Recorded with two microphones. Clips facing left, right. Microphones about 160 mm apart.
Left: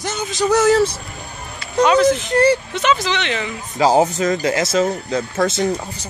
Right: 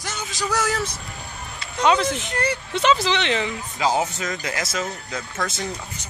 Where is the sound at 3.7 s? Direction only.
40° left (ahead or behind).